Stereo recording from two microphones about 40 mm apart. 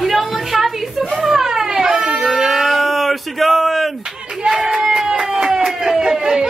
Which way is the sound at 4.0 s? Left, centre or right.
Centre.